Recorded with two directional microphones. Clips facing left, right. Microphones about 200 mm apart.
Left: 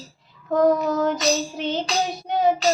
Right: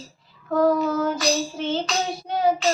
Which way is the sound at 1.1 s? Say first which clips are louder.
Left 1 dB; 15° left (ahead or behind).